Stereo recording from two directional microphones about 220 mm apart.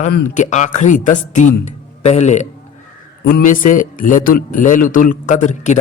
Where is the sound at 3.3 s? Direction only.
40° left (ahead or behind).